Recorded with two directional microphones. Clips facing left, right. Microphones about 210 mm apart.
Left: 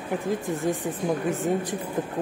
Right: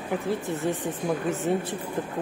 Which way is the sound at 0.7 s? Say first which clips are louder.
Left 1 dB; 10° left (ahead or behind).